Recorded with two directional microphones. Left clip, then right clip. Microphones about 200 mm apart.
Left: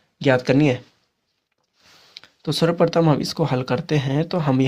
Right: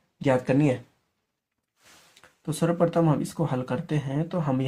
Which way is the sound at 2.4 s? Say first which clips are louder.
Left 6 dB; 50° left (ahead or behind).